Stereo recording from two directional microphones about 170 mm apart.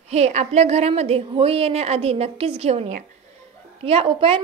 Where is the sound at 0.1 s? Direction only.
40° right (ahead or behind).